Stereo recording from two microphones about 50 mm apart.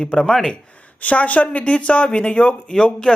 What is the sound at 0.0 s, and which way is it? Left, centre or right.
Speech, centre.